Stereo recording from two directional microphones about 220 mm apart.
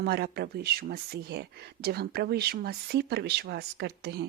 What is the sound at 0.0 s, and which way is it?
Speech, 50° right (ahead or behind).